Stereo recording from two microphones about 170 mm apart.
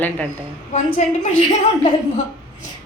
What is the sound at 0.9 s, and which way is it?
A woman's voice, 50° left (ahead or behind).